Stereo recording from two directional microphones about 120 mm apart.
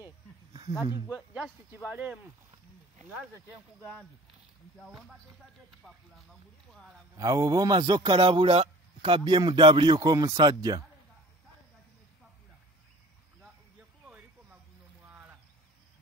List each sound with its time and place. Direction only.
0.5 s snake: 35° right (ahead or behind)
1.9 s speech: 15° right (ahead or behind)
4.7 s speech: centre (ahead or behind)
7.2 s speech: 30° right (ahead or behind); by 9.2 s 50° right (ahead or behind)
9.2 s speech: 35° right (ahead or behind)
14.0 s a sound: 10° right (ahead or behind)